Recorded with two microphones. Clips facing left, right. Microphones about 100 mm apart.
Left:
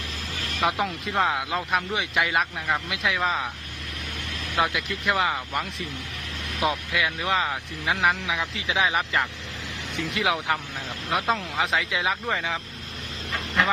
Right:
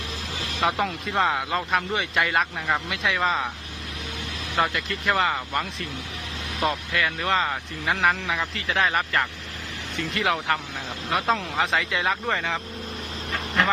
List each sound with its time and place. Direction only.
0.3 s vehicle: 45° left (ahead or behind)
0.6 s speech: centre (ahead or behind)
4.6 s speech: 5° left (ahead or behind)
11.1 s speech: centre (ahead or behind)